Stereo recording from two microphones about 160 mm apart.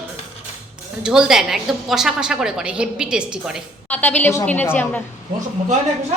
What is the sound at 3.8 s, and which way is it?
A woman's voice, 10° left (ahead or behind).